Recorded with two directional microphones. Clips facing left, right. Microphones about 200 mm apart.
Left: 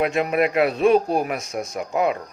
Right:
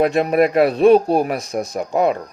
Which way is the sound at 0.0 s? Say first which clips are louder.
Right 5 dB; 40° right (ahead or behind).